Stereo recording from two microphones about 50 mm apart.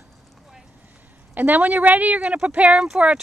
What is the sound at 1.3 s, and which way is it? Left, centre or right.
Speech, right.